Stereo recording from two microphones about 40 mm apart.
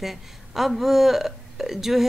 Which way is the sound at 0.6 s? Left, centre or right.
Centre.